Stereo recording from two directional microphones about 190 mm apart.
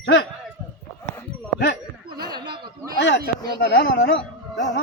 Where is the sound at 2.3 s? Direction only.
20° right (ahead or behind).